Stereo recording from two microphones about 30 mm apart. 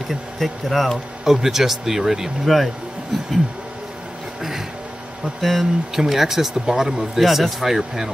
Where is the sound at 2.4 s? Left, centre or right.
Centre.